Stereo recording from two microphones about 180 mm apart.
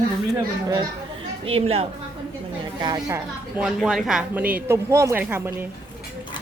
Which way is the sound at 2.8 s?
20° right (ahead or behind).